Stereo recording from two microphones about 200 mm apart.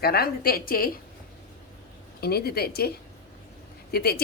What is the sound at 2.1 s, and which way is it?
A woman's voice, 50° left (ahead or behind).